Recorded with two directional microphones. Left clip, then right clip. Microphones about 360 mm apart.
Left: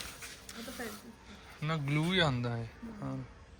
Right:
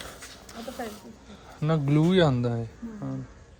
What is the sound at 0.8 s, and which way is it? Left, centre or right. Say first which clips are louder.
Speech: right 6 dB; centre.